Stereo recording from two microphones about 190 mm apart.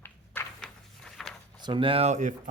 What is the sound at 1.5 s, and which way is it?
Speech, 25° right (ahead or behind).